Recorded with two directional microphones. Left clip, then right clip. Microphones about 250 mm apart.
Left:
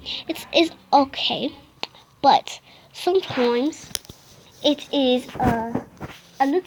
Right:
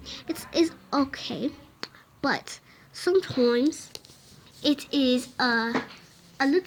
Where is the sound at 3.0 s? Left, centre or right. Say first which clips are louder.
Left 3 dB; centre.